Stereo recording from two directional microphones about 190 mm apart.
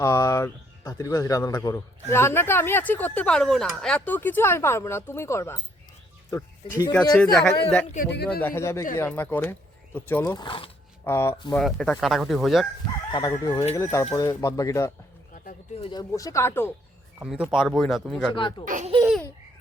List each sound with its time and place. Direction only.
0.0 s a man's voice: 15° left (ahead or behind)
7.2 s a man's voice: 5° left (ahead or behind)
10.3 s speech: 25° left (ahead or behind)
11.0 s a man's voice: 15° left (ahead or behind)
11.6 s speech: centre (ahead or behind)
13.1 s a man's voice: 25° left (ahead or behind)
17.2 s speech: centre (ahead or behind)
18.3 s speech: 25° left (ahead or behind)
18.6 s speech: 45° right (ahead or behind)